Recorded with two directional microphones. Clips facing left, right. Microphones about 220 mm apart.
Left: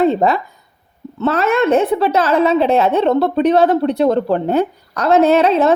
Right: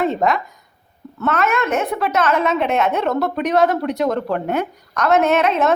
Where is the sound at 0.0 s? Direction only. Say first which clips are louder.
Left 5 dB; 30° left (ahead or behind).